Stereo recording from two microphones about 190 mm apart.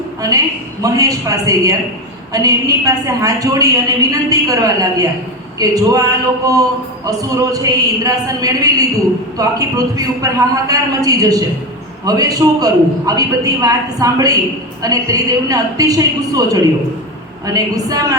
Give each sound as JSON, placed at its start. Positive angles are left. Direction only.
{"t": 0.2, "sound": "a woman's voice", "side_deg": -20}